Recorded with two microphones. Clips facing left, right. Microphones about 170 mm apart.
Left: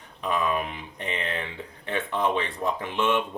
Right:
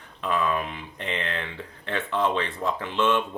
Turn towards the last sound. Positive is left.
turn(degrees=15)  # may be behind; listen again after turning